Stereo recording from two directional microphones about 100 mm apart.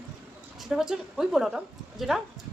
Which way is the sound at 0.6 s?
5° right (ahead or behind).